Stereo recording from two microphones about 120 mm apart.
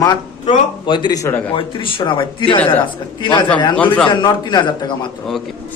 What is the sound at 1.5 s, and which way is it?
A man's voice, 45° left (ahead or behind).